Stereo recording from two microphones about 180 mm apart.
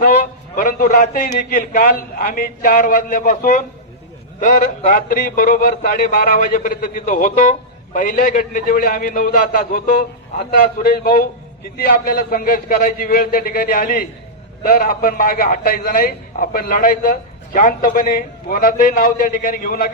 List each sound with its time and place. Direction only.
0.5 s a man's voice: 50° left (ahead or behind)